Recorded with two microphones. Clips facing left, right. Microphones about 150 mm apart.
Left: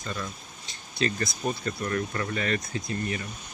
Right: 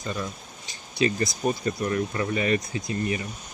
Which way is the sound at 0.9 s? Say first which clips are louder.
Right 4 dB; 20° right (ahead or behind).